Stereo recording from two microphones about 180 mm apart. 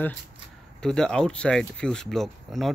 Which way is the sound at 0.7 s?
5° left (ahead or behind).